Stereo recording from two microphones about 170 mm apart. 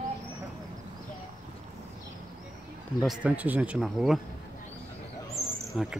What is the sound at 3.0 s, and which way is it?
Speech, 10° right (ahead or behind).